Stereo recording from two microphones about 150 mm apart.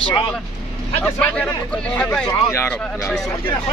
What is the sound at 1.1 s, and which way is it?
Speech, 10° left (ahead or behind).